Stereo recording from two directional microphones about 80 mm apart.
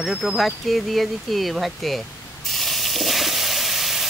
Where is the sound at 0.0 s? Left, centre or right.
Centre.